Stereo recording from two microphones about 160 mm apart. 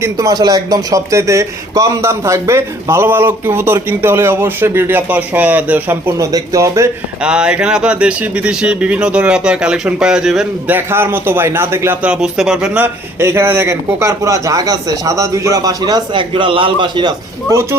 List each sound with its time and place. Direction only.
0.0 s speech: 20° right (ahead or behind)
7.2 s speech: 5° right (ahead or behind); by 17.6 s 25° right (ahead or behind)